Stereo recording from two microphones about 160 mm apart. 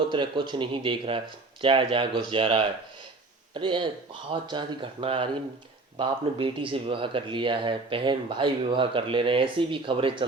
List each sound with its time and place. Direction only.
0.1 s speech: 30° right (ahead or behind)